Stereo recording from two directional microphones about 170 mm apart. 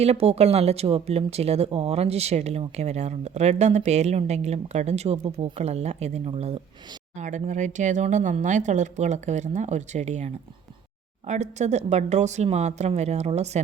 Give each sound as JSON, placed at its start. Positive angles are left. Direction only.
{"t": 0.0, "sound": "speech", "side_deg": -40}